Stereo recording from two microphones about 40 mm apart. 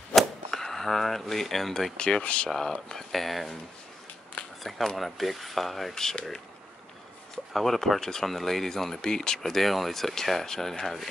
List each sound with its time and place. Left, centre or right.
0.1 s cap gun: centre
1.3 s speech: centre
2.0 s speech: left
3.0 s speech: centre
4.6 s speech: centre
7.5 s speech: centre
9.5 s speech: centre